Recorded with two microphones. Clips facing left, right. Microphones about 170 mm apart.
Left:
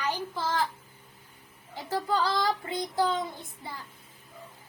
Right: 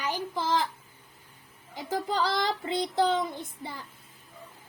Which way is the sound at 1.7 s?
15° right (ahead or behind).